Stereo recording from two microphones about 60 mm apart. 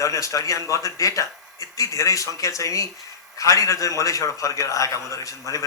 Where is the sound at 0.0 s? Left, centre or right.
Left.